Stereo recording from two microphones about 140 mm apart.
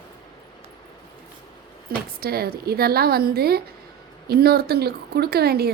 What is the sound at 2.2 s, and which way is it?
A woman's voice, 90° right.